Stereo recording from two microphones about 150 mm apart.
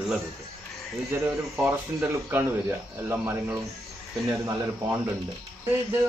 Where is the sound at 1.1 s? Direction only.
15° right (ahead or behind).